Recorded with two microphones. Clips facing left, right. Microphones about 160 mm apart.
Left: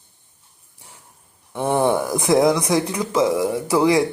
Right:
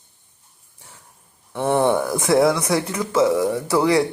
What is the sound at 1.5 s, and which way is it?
Speech, 10° left (ahead or behind).